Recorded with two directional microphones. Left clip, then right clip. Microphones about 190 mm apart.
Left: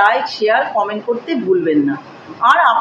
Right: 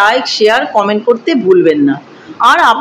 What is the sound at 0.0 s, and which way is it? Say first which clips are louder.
A woman's voice: right 4 dB; 60° right (ahead or behind).